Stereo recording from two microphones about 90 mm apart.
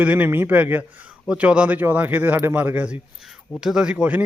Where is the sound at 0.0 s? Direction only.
20° right (ahead or behind).